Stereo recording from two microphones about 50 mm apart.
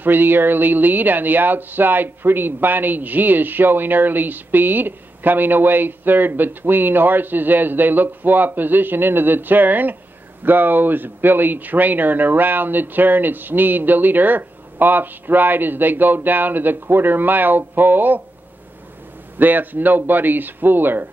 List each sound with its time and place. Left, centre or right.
0.0 s speech: right
19.3 s speech: right